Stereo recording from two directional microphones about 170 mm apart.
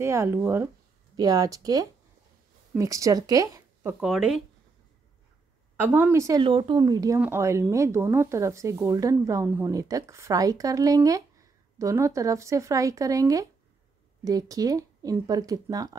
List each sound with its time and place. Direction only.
0.0 s a woman's voice: 15° right (ahead or behind)
4.0 s speech: 5° right (ahead or behind)
5.8 s speech: 10° right (ahead or behind)
6.4 s speech: 30° right (ahead or behind)